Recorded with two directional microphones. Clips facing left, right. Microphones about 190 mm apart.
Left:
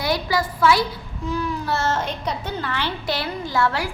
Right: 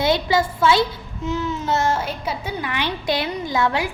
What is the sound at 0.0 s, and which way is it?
A child's voice, 25° right (ahead or behind).